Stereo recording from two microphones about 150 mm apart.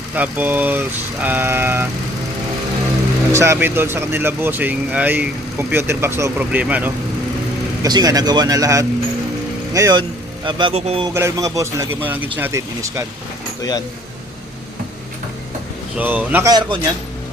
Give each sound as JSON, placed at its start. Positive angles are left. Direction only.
{"t": 0.1, "sound": "speech", "side_deg": -10}
{"t": 3.3, "sound": "speech", "side_deg": -20}
{"t": 7.8, "sound": "speech", "side_deg": -25}
{"t": 10.0, "sound": "speech", "side_deg": -35}
{"t": 10.8, "sound": "a man's voice", "side_deg": -45}
{"t": 11.1, "sound": "speech", "side_deg": -20}
{"t": 13.6, "sound": "speech", "side_deg": 25}
{"t": 16.0, "sound": "speech", "side_deg": -10}
{"t": 16.5, "sound": "speech", "side_deg": -30}